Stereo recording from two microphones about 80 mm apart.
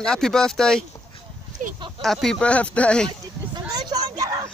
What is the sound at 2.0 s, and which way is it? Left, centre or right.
Speech, centre.